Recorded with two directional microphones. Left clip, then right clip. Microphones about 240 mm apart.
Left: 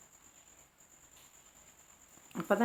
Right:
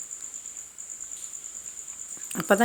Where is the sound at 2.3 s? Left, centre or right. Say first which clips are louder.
Right 9 dB; right.